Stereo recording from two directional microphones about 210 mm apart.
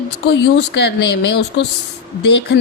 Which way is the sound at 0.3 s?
55° left (ahead or behind).